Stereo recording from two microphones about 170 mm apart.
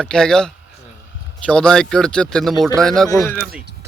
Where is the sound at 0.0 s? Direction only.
5° left (ahead or behind).